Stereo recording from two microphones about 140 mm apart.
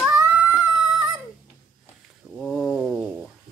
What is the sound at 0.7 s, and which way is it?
Dog, centre (ahead or behind).